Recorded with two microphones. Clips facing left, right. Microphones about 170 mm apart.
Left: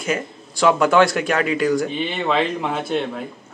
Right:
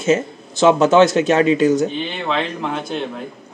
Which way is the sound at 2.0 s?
5° left (ahead or behind).